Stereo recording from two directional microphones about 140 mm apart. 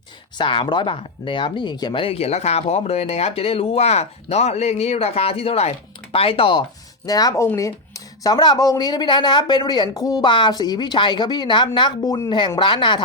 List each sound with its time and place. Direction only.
0.3 s speech: 35° left (ahead or behind)